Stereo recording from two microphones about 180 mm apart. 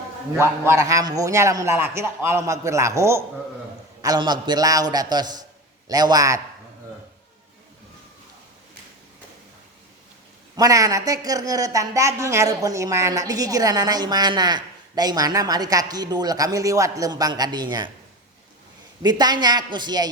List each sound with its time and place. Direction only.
0.3 s a man's voice: 15° right (ahead or behind)
10.6 s a woman's voice: 20° right (ahead or behind)
19.0 s a woman's voice: 25° right (ahead or behind)